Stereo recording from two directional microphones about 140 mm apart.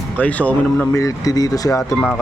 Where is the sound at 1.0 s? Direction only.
25° left (ahead or behind).